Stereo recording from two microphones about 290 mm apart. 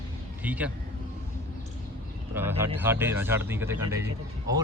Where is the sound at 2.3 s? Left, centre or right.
Centre.